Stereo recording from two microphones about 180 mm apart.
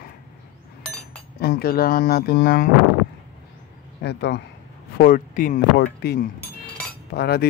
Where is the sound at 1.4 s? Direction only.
60° left (ahead or behind).